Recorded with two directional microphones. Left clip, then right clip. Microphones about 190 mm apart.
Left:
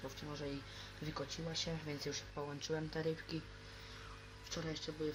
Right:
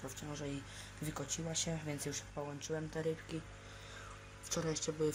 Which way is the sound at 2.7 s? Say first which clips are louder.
Right 1 dB; 5° right (ahead or behind).